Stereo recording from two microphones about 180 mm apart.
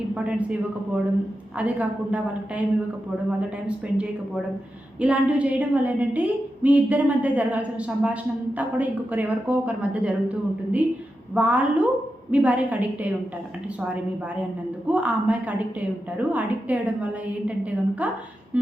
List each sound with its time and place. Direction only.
0.1 s a man's voice: 5° right (ahead or behind)
1.5 s a woman's voice: 5° right (ahead or behind)
4.9 s a woman's voice: 5° right (ahead or behind)
14.8 s a woman's voice: 5° right (ahead or behind)